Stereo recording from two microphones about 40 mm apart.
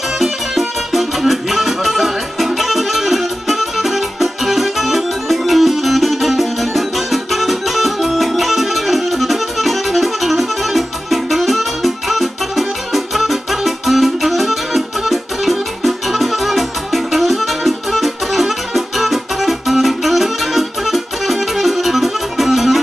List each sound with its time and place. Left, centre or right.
0.2 s music: centre